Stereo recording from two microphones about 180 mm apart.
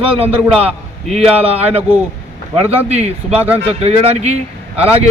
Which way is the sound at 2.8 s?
35° right (ahead or behind).